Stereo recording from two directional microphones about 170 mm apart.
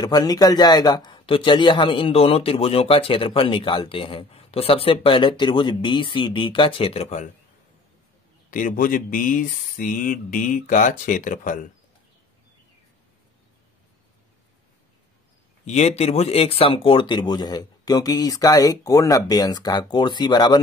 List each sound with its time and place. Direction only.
0.0 s a man's voice: 25° left (ahead or behind); by 7.2 s 40° left (ahead or behind)
8.5 s speech: 55° left (ahead or behind)
15.6 s speech: 40° left (ahead or behind); by 20.6 s 25° left (ahead or behind)